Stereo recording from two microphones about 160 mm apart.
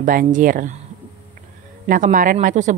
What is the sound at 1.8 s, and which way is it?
Speech, 55° right (ahead or behind).